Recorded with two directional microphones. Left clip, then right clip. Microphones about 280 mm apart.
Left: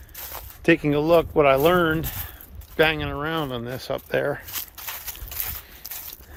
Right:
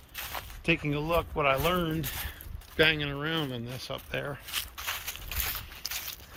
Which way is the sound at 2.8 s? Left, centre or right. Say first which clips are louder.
Left 5 dB; centre.